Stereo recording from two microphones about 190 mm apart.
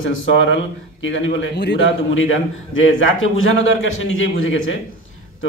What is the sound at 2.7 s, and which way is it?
A man's voice, 90° left.